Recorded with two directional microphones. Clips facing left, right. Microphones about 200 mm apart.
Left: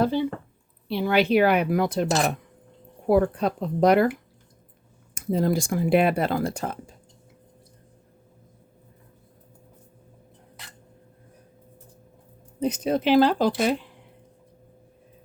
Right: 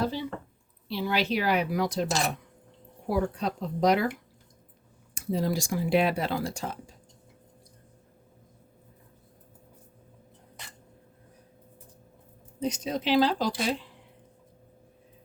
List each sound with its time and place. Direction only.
0.0 s a sound: 55° left (ahead or behind)
0.9 s speech: 55° left (ahead or behind)
5.1 s speech: 55° left (ahead or behind)
12.5 s speech: 55° left (ahead or behind)